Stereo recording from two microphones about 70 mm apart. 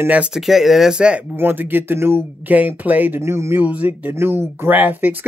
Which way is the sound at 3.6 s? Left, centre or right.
Right.